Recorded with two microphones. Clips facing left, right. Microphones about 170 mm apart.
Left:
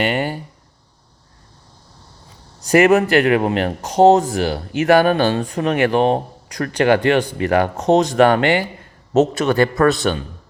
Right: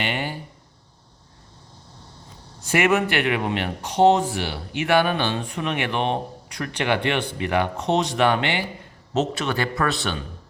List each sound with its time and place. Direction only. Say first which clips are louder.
0.0 s a man's voice: left 7 dB; 45° left (ahead or behind)
2.6 s a man's voice: left 7 dB; 40° left (ahead or behind)